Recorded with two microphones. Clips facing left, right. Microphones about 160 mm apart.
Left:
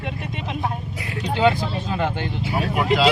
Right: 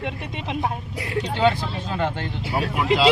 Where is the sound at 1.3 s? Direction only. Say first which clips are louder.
Left 3 dB; 5° left (ahead or behind).